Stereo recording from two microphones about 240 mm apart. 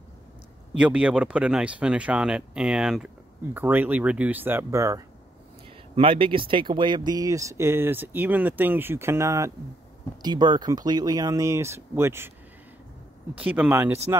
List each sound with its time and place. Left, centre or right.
0.7 s speech: centre
13.3 s speech: centre